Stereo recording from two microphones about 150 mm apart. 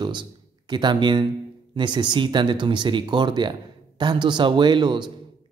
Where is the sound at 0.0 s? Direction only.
30° right (ahead or behind).